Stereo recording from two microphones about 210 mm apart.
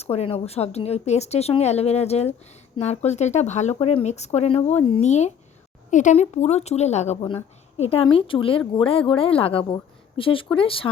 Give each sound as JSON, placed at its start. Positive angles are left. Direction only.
{"t": 0.0, "sound": "speech", "side_deg": 30}